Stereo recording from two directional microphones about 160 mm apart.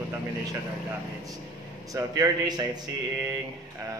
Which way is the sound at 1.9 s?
25° right (ahead or behind).